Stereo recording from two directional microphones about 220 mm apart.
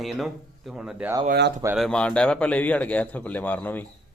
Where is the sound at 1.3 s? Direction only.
50° right (ahead or behind).